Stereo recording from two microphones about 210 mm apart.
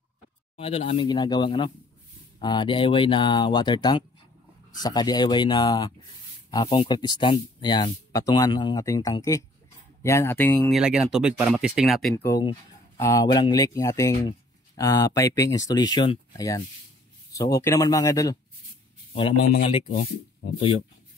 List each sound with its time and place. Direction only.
0.6 s speech: 25° left (ahead or behind); by 10.8 s 10° left (ahead or behind)
10.8 s speech: 5° right (ahead or behind)
12.3 s speech: 20° left (ahead or behind)
19.6 s speech: 25° left (ahead or behind)